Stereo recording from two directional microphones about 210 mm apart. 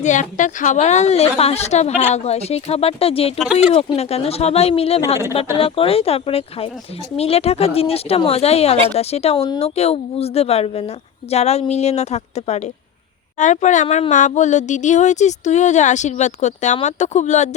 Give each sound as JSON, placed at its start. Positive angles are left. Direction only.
{"t": 0.0, "sound": "speech", "side_deg": 35}
{"t": 3.3, "sound": "speech", "side_deg": -5}
{"t": 3.6, "sound": "speech", "side_deg": 30}